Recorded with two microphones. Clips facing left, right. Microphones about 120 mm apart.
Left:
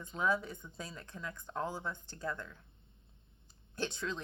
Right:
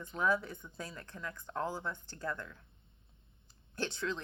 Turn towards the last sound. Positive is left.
turn(degrees=15)  # may be behind; listen again after turning